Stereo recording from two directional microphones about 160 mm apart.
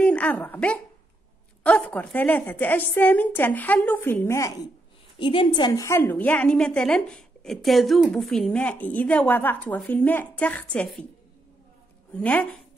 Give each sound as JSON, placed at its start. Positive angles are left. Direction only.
{"t": 0.0, "sound": "a woman's voice", "side_deg": 10}
{"t": 5.2, "sound": "a woman's voice", "side_deg": 30}
{"t": 5.7, "sound": "a woman's voice", "side_deg": 20}
{"t": 12.1, "sound": "a woman's voice", "side_deg": 10}